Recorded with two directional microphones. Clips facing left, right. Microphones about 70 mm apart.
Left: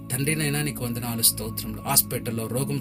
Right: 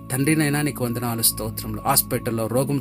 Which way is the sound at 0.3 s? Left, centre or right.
Right.